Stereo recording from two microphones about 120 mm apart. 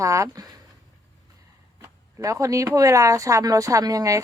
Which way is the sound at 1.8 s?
25° right (ahead or behind).